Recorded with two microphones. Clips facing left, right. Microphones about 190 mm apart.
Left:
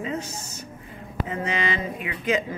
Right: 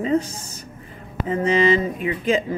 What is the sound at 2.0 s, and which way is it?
Speech, 30° right (ahead or behind).